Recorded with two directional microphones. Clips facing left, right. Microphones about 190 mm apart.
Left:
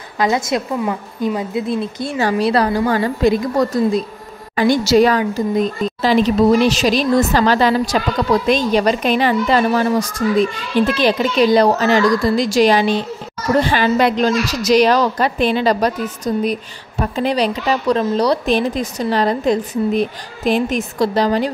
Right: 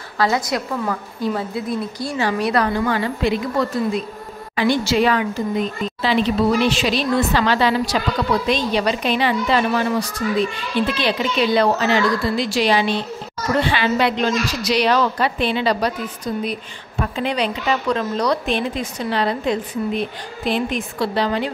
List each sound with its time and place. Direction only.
0.2 s a woman's voice: 20° left (ahead or behind)
2.1 s a woman's voice: 35° left (ahead or behind)